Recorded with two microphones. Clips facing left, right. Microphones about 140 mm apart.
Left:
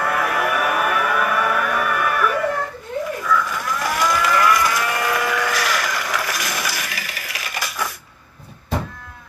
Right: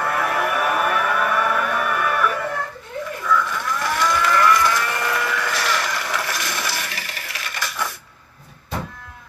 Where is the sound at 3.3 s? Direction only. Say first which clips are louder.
Right 2 dB; 10° left (ahead or behind).